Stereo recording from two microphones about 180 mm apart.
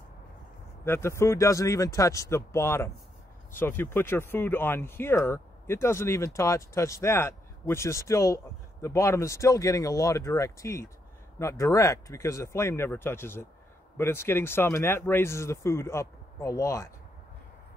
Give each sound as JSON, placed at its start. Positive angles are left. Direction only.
{"t": 0.8, "sound": "speech", "side_deg": 15}